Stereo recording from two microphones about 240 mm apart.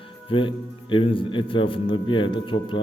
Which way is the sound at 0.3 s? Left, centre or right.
Left.